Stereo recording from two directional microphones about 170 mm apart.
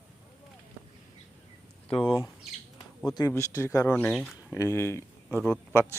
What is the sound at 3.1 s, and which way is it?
Speech, 20° left (ahead or behind).